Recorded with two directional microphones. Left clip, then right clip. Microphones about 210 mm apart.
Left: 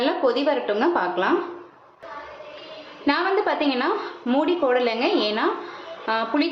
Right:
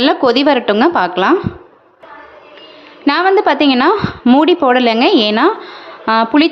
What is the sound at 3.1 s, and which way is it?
A woman's voice, 55° right (ahead or behind).